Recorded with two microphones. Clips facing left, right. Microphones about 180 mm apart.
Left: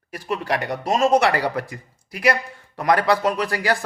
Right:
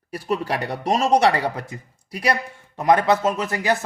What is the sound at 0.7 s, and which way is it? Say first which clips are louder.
A man's voice: left 1 dB; 30° right (ahead or behind).